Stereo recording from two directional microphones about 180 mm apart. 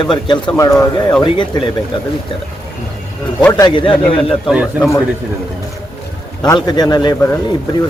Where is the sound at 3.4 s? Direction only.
20° left (ahead or behind).